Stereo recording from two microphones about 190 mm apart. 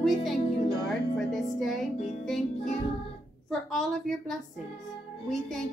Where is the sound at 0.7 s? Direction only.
Centre (ahead or behind).